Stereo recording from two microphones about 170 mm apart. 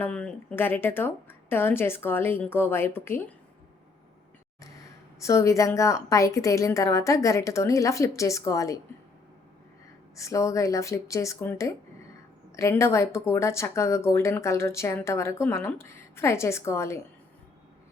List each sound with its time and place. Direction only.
0.0 s speech: 5° left (ahead or behind)
5.2 s a woman's voice: 15° left (ahead or behind)
10.2 s speech: 20° left (ahead or behind)